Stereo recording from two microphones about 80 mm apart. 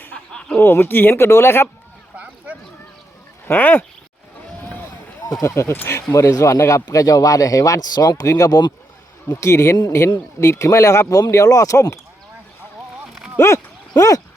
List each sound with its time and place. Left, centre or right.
0.3 s speech: centre
0.6 s speech: left
2.1 s a sound: centre
3.4 s speech: left
5.2 s speech: left
9.3 s speech: left
13.4 s speech: left